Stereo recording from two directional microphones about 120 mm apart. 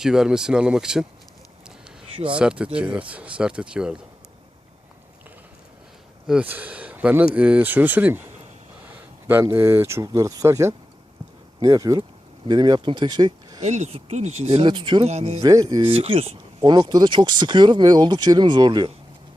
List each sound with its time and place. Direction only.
0.0 s speech: 5° right (ahead or behind)
2.1 s speech: 45° right (ahead or behind)
2.4 s speech: 5° right (ahead or behind)
6.2 s speech: 10° right (ahead or behind); by 13.6 s 35° right (ahead or behind)
13.6 s speech: 80° right; by 14.6 s 65° right (ahead or behind)
14.6 s speech: 40° right (ahead or behind)
15.0 s speech: 60° right (ahead or behind)
15.4 s speech: 30° right (ahead or behind)
15.8 s speech: 50° right (ahead or behind)
16.6 s speech: 35° right (ahead or behind)